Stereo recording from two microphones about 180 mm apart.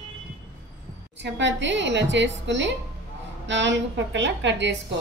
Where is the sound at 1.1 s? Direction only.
80° right.